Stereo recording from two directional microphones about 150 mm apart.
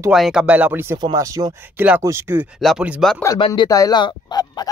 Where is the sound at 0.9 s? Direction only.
25° right (ahead or behind).